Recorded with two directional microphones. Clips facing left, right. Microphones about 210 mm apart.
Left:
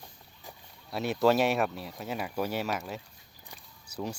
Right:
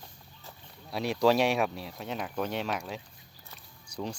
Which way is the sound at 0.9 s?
Centre (ahead or behind).